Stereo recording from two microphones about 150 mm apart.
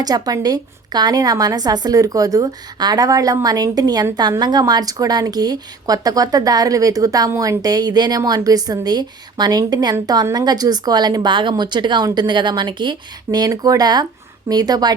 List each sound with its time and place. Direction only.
0.0 s a woman's voice: 25° right (ahead or behind)